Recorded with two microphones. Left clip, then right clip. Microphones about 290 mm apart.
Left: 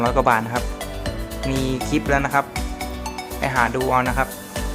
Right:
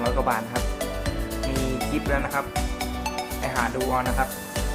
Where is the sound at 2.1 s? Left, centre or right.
Left.